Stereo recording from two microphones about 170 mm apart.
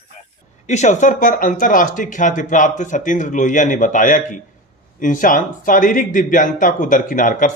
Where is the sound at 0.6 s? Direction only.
45° left (ahead or behind).